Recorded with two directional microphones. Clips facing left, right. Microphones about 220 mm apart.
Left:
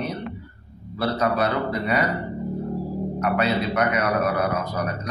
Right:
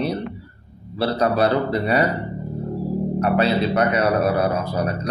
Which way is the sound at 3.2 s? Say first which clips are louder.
Right 3 dB; 30° right (ahead or behind).